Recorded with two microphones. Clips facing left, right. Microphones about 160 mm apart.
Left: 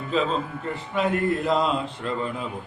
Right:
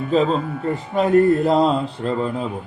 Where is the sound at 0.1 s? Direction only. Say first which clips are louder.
Right 6 dB; 40° right (ahead or behind).